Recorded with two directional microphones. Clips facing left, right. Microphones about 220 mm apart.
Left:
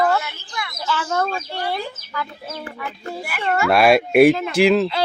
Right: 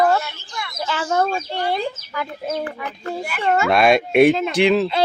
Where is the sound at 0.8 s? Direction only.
15° right (ahead or behind).